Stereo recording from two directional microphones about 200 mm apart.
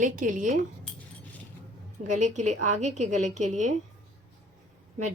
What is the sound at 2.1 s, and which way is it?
A woman's voice, 40° right (ahead or behind).